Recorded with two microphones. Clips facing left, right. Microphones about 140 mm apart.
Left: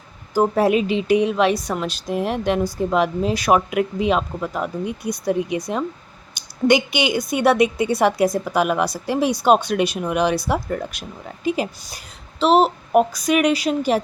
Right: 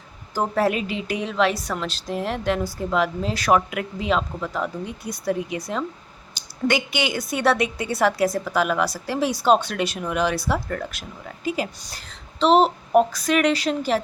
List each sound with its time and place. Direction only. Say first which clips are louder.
0.3 s a woman's voice: left 5 dB; 15° left (ahead or behind)